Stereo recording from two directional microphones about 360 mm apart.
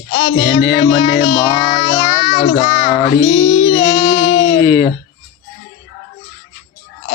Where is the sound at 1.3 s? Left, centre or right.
Centre.